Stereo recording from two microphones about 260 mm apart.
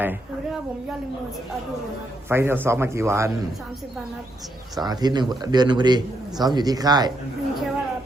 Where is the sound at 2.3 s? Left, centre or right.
Centre.